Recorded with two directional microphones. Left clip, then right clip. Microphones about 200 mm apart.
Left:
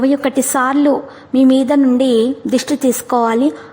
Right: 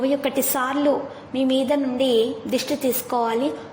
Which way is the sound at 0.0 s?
35° left (ahead or behind).